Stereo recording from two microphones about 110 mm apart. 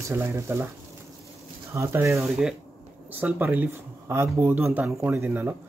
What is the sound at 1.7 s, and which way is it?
Speech, 25° right (ahead or behind).